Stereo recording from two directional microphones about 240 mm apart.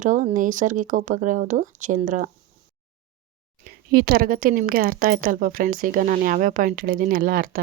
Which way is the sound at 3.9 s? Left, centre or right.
Right.